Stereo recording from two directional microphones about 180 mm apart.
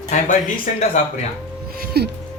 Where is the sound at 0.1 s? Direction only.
45° left (ahead or behind).